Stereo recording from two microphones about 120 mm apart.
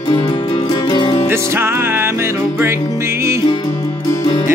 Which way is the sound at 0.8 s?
35° left (ahead or behind).